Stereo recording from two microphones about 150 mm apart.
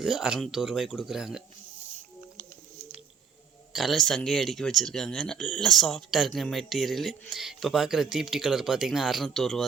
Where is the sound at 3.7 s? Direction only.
Centre (ahead or behind).